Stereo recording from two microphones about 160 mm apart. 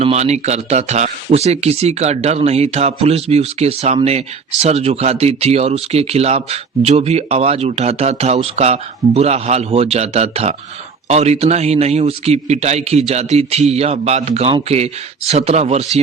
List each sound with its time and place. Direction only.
0.0 s speech: 40° right (ahead or behind)